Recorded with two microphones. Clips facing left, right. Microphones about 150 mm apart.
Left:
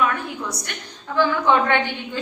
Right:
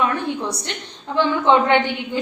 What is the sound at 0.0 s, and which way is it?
A woman's voice, 30° right (ahead or behind).